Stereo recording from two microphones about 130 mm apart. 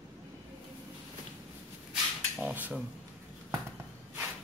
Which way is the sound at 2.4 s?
10° right (ahead or behind).